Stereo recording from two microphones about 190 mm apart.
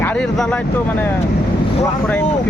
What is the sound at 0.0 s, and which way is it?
Speech, 5° left (ahead or behind).